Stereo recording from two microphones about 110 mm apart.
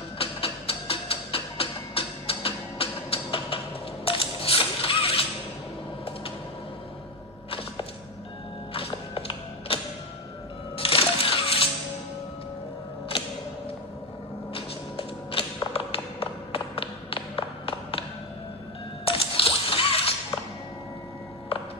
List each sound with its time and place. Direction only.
0.2 s music: 60° left (ahead or behind)
8.7 s music: 55° left (ahead or behind)
10.8 s music: 55° left (ahead or behind)
14.5 s music: 55° left (ahead or behind)
19.0 s a sound: 55° left (ahead or behind)